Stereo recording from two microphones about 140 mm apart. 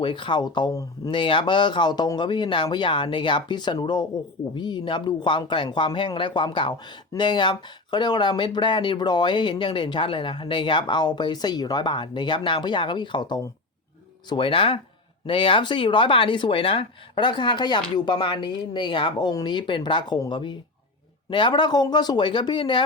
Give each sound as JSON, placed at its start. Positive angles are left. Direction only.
{"t": 0.0, "sound": "speech", "side_deg": 35}
{"t": 0.7, "sound": "speech", "side_deg": 25}
{"t": 1.1, "sound": "speech", "side_deg": 35}